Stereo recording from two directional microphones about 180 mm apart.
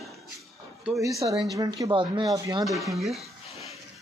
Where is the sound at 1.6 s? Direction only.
20° right (ahead or behind).